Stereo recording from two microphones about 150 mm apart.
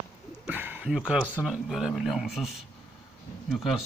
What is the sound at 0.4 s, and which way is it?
Speech, 10° right (ahead or behind).